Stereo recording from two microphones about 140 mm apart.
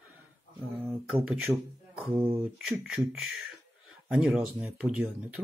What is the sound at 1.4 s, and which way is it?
Speech, 5° right (ahead or behind).